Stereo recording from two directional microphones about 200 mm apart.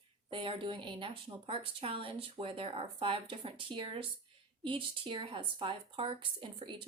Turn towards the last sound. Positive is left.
turn(degrees=-25)  # may be behind; listen again after turning